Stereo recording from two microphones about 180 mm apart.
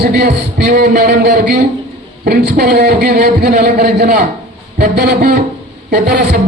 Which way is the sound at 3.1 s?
55° right (ahead or behind).